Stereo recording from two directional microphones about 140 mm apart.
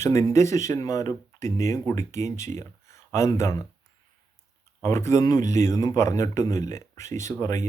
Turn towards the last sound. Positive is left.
turn(degrees=20)  # may be behind; listen again after turning